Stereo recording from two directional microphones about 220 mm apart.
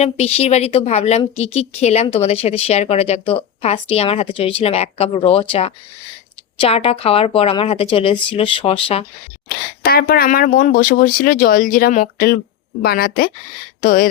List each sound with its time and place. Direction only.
0.0 s a woman's voice: 30° left (ahead or behind)
9.8 s speech: 45° left (ahead or behind)